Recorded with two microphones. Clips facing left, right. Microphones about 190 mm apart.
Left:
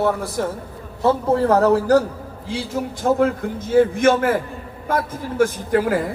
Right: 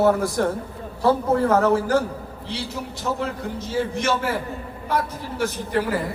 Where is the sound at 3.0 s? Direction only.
50° left (ahead or behind).